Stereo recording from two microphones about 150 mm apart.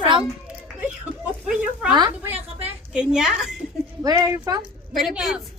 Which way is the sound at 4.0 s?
25° right (ahead or behind).